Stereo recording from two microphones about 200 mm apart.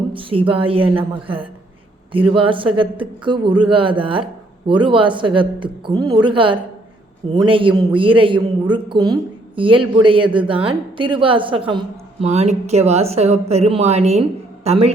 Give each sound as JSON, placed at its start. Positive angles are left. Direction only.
{"t": 0.1, "sound": "a woman's voice", "side_deg": -25}